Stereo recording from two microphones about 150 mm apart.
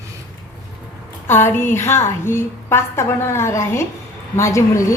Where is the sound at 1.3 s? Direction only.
15° left (ahead or behind).